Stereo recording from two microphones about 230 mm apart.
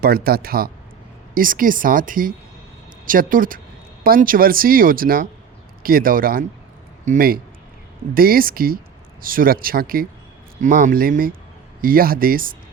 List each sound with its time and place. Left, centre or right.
0.0 s speech: right